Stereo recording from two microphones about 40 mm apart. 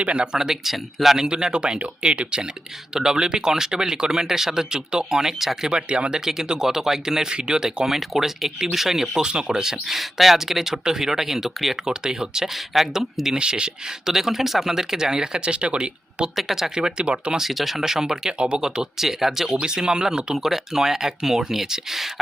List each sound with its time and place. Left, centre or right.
0.0 s speech: right
0.3 s speech: centre
1.3 s speech: right
5.2 s speech: centre
5.6 s speech: right
12.7 s speech: centre
13.4 s speech: right
14.1 s speech: centre
15.4 s speech: right
16.3 s speech: centre; by 17.3 s right
17.3 s speech: centre
18.3 s speech: right
18.6 s speech: centre
19.5 s speech: centre